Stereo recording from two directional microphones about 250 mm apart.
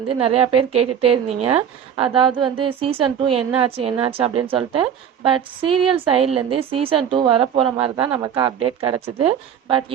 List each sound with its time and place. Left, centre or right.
0.3 s a woman's voice: right